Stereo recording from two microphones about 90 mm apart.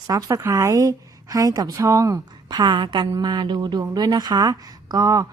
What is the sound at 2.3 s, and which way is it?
A woman's voice, 50° right (ahead or behind).